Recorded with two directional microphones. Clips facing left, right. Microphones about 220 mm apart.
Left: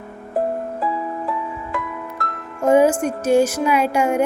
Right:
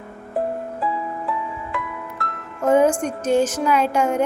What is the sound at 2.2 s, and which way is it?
Music, 40° left (ahead or behind).